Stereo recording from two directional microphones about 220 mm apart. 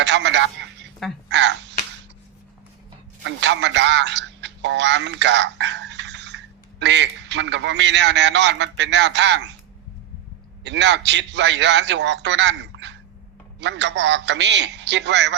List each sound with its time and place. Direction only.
0.0 s a sound: 55° right (ahead or behind)
1.3 s speech: 55° right (ahead or behind)
3.2 s a man's voice: 55° right (ahead or behind)
10.6 s a man's voice: 55° right (ahead or behind)